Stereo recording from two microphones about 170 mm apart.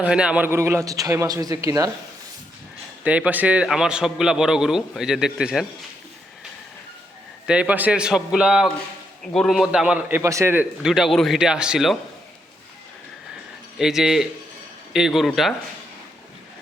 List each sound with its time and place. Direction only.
0.0 s a man's voice: 5° right (ahead or behind)
3.0 s a man's voice: 10° right (ahead or behind)
7.4 s a man's voice: 5° right (ahead or behind)
13.7 s a man's voice: centre (ahead or behind)